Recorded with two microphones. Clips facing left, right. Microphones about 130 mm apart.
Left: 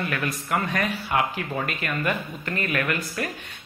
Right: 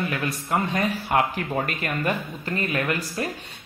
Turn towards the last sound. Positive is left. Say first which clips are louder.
# right 1 dB
turn(degrees=-25)  # may be behind; listen again after turning